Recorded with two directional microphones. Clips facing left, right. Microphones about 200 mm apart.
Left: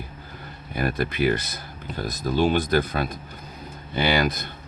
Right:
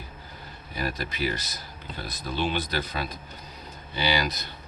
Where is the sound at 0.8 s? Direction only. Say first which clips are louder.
Left 6 dB; 55° left (ahead or behind).